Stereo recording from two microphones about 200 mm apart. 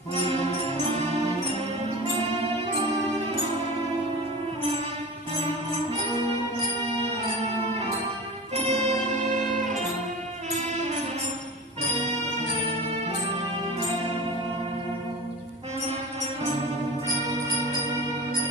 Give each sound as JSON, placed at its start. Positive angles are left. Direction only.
{"t": 8.5, "sound": "music", "side_deg": -35}